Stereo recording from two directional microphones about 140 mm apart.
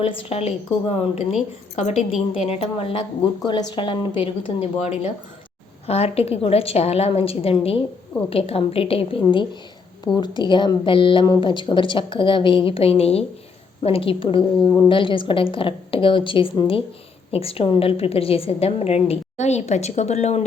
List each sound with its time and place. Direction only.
0.0 s a woman's voice: 45° left (ahead or behind)
3.4 s a woman's voice: 30° left (ahead or behind); by 20.4 s 50° left (ahead or behind)